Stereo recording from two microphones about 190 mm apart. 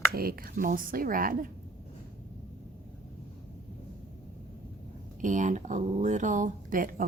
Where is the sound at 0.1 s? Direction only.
50° right (ahead or behind).